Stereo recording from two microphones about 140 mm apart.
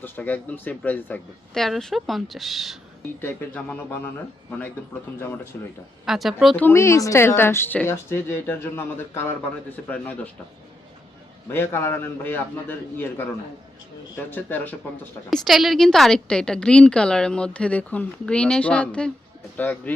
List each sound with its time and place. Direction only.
0.0 s a woman's voice: 15° left (ahead or behind)
1.5 s a woman's voice: centre (ahead or behind)
3.2 s a woman's voice: 10° left (ahead or behind)
5.5 s a woman's voice: 15° left (ahead or behind)
6.1 s a woman's voice: centre (ahead or behind)
6.6 s a woman's voice: 15° left (ahead or behind)
11.4 s a woman's voice: 15° left (ahead or behind)
15.3 s a woman's voice: centre (ahead or behind)